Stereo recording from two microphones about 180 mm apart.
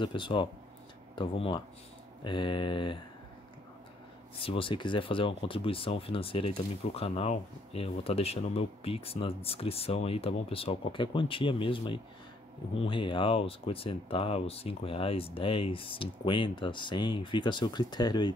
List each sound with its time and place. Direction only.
0.0 s speech: 25° left (ahead or behind)
4.4 s speech: 30° left (ahead or behind)